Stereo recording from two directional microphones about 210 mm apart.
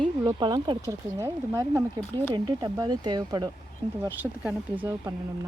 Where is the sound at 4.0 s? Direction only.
10° right (ahead or behind).